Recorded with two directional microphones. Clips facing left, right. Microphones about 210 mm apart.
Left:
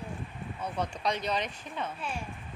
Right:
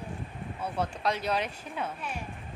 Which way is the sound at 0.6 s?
5° right (ahead or behind).